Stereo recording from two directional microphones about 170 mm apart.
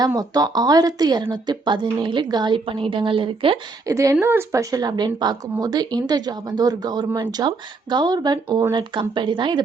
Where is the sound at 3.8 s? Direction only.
20° right (ahead or behind).